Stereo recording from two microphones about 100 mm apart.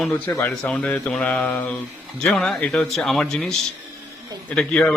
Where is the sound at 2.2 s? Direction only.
5° left (ahead or behind).